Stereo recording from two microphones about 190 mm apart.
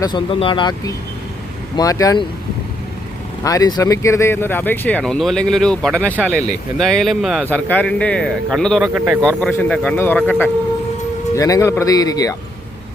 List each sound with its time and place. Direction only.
0.0 s speech: 25° left (ahead or behind)
3.4 s a man's voice: 20° left (ahead or behind); by 9.1 s 10° right (ahead or behind)
9.2 s speech: 5° left (ahead or behind)